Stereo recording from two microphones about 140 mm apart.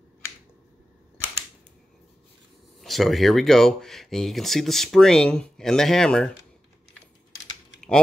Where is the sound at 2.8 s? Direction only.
Centre (ahead or behind).